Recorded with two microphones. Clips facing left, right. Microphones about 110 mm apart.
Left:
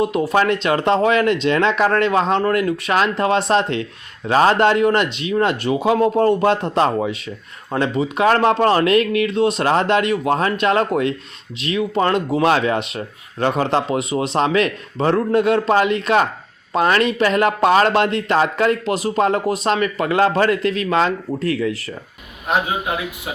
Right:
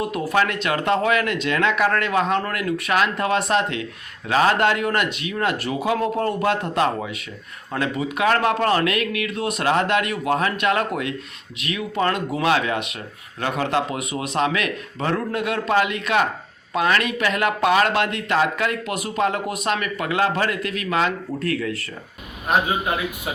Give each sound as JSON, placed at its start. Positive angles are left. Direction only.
{"t": 0.0, "sound": "speech", "side_deg": 25}